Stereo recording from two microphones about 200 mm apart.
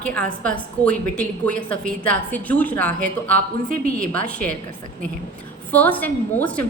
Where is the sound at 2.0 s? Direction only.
5° left (ahead or behind).